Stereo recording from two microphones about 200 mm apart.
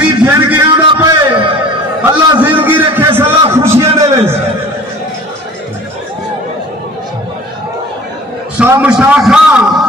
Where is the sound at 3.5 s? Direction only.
10° right (ahead or behind).